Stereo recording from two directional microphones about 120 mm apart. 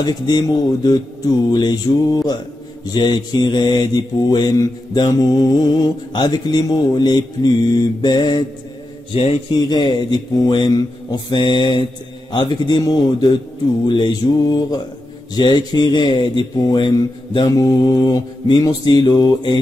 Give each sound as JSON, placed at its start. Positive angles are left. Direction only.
{"t": 0.0, "sound": "mantra", "side_deg": 35}
{"t": 9.1, "sound": "a man's voice", "side_deg": 55}
{"t": 9.5, "sound": "mantra", "side_deg": 35}